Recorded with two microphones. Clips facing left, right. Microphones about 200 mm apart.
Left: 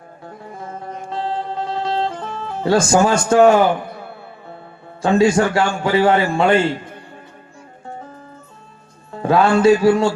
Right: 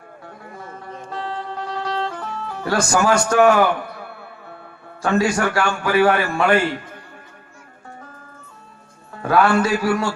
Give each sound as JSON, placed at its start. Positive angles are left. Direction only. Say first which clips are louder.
{"t": 1.1, "sound": "music", "louder": "left 5 dB", "side_deg": 25}
{"t": 5.0, "sound": "a man's voice", "louder": "left 5 dB", "side_deg": 25}
{"t": 9.1, "sound": "a man's voice", "louder": "left 2 dB", "side_deg": 25}